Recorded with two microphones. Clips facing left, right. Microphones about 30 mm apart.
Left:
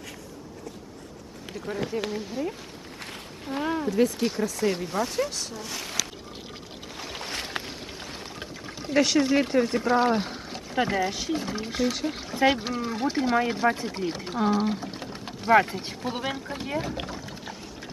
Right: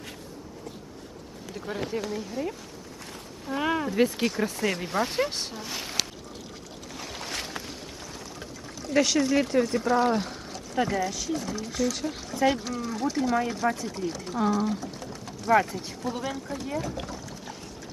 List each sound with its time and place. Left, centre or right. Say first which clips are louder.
1.5 s speech: left 2 dB; centre
3.6 s speech: even; right
5.5 s speech: even; centre
6.9 s boat: left 1 dB; centre
7.6 s a sound: left 2 dB; left
8.0 s pour: left 2 dB; left
8.6 s pour: left 2 dB; left
8.9 s speech: left 1 dB; centre